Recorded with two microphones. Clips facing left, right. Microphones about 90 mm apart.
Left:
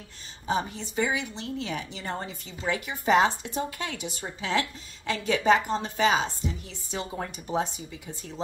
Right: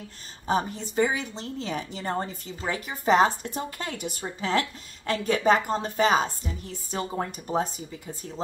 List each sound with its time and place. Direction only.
0.5 s a woman's voice: 40° right (ahead or behind)